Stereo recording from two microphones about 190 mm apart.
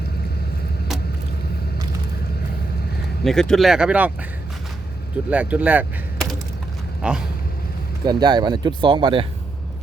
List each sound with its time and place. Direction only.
3.2 s speech: 5° left (ahead or behind)
5.3 s speech: 10° right (ahead or behind)
7.0 s a sound: 5° right (ahead or behind)
8.0 s speech: 20° right (ahead or behind)